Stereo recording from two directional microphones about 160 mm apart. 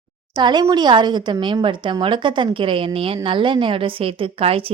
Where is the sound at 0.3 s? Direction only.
30° right (ahead or behind).